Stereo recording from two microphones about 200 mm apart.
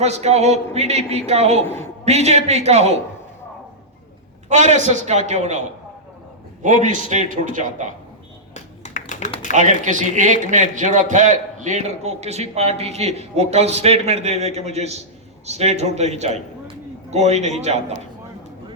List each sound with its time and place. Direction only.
0.0 s a man's voice: 35° right (ahead or behind)
1.6 s a man's voice: 10° left (ahead or behind)
2.0 s a man's voice: 30° right (ahead or behind)
4.4 s a man's voice: 35° right (ahead or behind)
8.5 s typing: 35° left (ahead or behind)
9.6 s a man's voice: 40° right (ahead or behind)